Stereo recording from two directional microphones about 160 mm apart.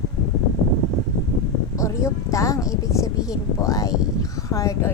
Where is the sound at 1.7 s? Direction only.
20° left (ahead or behind).